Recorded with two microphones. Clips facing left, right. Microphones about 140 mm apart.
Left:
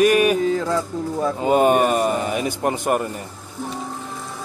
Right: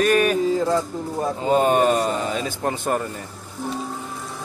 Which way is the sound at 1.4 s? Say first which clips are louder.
Left 1 dB; 15° left (ahead or behind).